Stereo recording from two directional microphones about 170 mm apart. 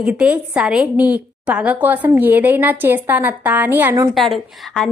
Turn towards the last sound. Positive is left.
turn(degrees=0)  # may be behind; listen again after turning